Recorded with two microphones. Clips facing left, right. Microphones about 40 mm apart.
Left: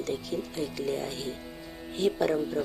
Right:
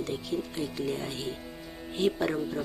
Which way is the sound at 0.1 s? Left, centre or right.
Centre.